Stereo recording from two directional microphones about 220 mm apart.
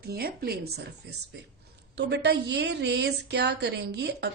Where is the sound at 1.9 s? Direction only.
50° right (ahead or behind).